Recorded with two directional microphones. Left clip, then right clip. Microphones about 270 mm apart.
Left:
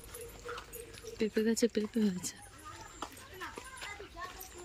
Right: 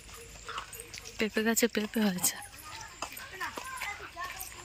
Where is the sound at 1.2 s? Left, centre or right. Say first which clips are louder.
Right 2 dB; centre.